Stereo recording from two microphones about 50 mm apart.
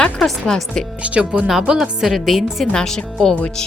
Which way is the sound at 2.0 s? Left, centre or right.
Centre.